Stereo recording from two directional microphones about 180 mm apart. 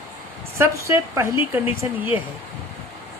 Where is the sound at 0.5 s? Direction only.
15° right (ahead or behind).